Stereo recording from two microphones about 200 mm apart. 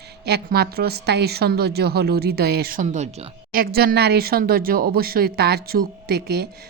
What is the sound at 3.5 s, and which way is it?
Speech, 50° right (ahead or behind).